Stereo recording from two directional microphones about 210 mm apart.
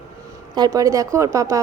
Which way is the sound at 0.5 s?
15° right (ahead or behind).